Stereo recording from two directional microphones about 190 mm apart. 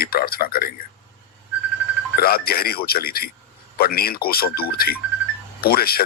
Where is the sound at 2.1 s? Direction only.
50° left (ahead or behind).